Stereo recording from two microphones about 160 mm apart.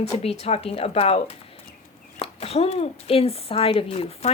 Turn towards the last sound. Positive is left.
turn(degrees=35)  # may be behind; listen again after turning